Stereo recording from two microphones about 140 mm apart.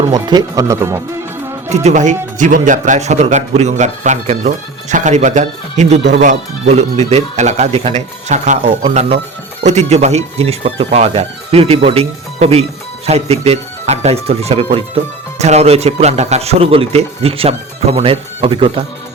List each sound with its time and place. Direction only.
0.1 s speech: 30° right (ahead or behind)
1.7 s a man's voice: 55° right (ahead or behind); by 18.9 s 40° right (ahead or behind)